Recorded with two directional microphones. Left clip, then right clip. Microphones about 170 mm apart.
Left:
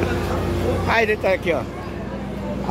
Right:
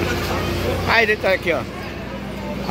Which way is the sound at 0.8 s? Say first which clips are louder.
Right 3 dB; 10° left (ahead or behind).